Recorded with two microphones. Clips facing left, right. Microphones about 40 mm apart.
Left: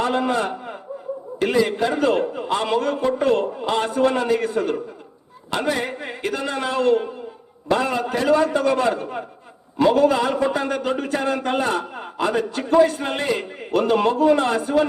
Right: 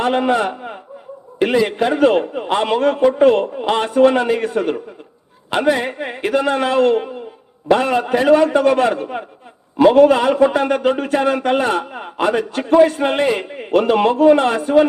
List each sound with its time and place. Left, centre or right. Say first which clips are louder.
0.0 s a man's voice: right 5 dB; right
1.7 s a man's voice: right 5 dB; right